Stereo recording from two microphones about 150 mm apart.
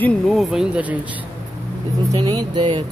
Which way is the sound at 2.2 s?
30° right (ahead or behind).